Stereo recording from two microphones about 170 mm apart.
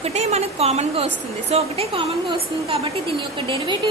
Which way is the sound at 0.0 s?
40° right (ahead or behind).